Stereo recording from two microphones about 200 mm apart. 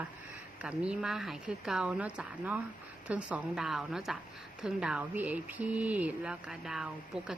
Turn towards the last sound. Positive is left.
turn(degrees=-5)  # may be behind; listen again after turning